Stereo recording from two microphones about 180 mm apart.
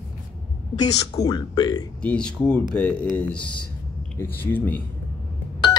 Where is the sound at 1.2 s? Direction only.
25° left (ahead or behind).